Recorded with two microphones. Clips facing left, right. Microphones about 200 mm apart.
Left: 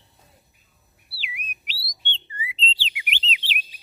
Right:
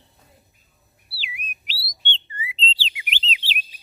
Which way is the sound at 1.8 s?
25° right (ahead or behind).